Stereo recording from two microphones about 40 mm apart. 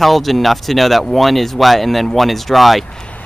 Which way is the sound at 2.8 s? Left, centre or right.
Left.